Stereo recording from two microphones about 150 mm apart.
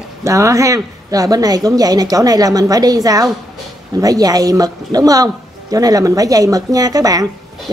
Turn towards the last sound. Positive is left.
turn(degrees=-25)  # may be behind; listen again after turning